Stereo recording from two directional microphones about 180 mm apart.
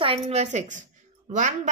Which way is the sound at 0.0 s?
35° right (ahead or behind).